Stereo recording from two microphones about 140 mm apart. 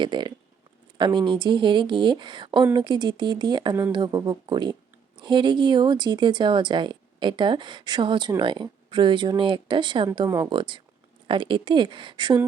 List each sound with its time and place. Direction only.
0.0 s speech: 35° right (ahead or behind)
10.2 s speech: 25° right (ahead or behind)
10.5 s speech: 35° right (ahead or behind)